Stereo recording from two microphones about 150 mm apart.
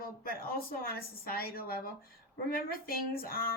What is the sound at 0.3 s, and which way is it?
Speech, 85° left.